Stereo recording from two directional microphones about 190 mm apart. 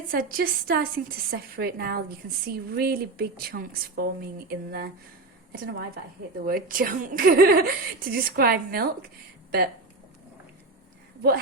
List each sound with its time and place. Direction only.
0.1 s a woman's voice: 50° right (ahead or behind)